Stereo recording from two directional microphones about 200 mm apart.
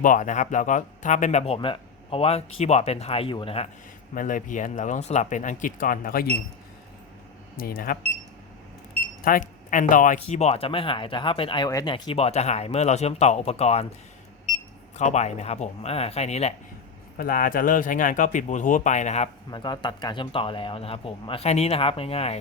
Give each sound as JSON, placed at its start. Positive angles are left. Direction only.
{"t": 0.0, "sound": "speech", "side_deg": 40}
{"t": 4.1, "sound": "speech", "side_deg": 40}
{"t": 7.5, "sound": "speech", "side_deg": 45}
{"t": 9.2, "sound": "speech", "side_deg": 40}
{"t": 14.9, "sound": "speech", "side_deg": 35}
{"t": 17.2, "sound": "speech", "side_deg": 45}
{"t": 19.5, "sound": "speech", "side_deg": 20}